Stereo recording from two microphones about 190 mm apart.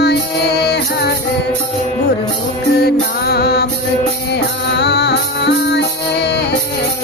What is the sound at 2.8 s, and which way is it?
Music, 55° left (ahead or behind).